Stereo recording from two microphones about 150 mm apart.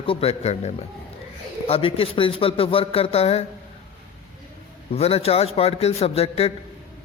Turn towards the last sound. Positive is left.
turn(degrees=45)  # may be behind; listen again after turning